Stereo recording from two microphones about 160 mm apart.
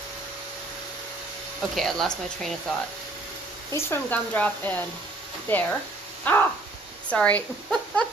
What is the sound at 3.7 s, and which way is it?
A woman's voice, 10° left (ahead or behind).